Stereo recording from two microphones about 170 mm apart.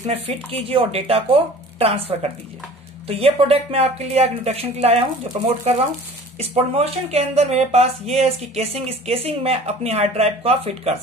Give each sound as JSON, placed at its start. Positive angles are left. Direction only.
{"t": 0.0, "sound": "speech", "side_deg": -35}